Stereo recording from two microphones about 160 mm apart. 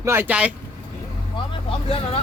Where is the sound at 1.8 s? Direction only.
35° left (ahead or behind).